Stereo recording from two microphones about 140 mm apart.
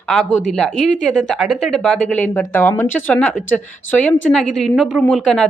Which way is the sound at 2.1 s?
15° left (ahead or behind).